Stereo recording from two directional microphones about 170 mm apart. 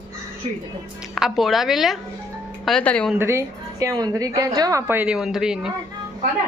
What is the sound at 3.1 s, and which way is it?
A woman's voice, 15° right (ahead or behind).